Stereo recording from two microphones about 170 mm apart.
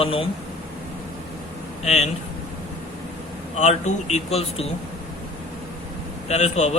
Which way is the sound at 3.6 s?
45° left (ahead or behind).